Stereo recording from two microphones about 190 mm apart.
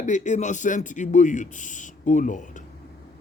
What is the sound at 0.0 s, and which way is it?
A man's voice, 40° left (ahead or behind).